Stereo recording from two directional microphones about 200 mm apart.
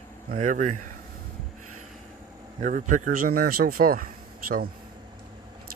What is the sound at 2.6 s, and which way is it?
A man's voice, 40° right (ahead or behind).